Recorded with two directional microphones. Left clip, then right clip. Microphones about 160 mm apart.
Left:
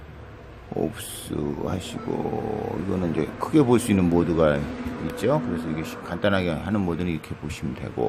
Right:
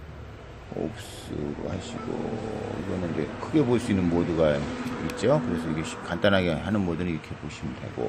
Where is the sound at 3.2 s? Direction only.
35° left (ahead or behind).